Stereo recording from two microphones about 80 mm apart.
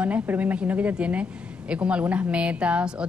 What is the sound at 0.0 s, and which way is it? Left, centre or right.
A woman's voice, centre.